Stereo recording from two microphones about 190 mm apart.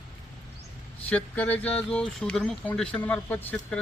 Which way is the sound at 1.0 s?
10° left (ahead or behind).